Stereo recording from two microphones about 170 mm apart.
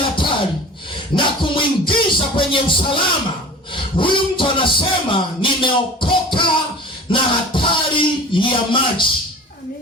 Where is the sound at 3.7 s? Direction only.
30° left (ahead or behind).